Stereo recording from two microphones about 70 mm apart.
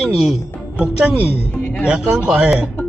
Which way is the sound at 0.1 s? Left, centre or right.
Centre.